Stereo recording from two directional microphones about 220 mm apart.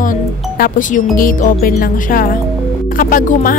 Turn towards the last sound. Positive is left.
turn(degrees=35)  # may be behind; listen again after turning